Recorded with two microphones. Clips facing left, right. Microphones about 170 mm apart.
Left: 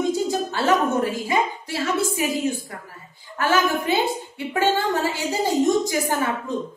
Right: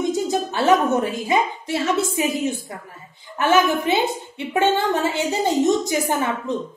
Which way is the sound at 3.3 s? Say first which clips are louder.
Right 3 dB; 20° right (ahead or behind).